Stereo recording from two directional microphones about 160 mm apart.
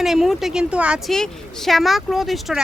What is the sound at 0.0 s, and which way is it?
A woman's voice, centre (ahead or behind).